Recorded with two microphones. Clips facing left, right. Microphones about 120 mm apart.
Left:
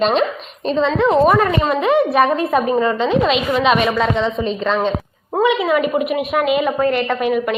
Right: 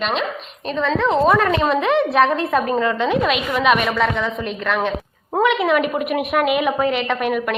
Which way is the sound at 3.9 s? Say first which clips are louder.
Left 3 dB; 20° left (ahead or behind).